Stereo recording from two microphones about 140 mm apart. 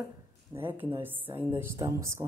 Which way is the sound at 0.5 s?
15° right (ahead or behind).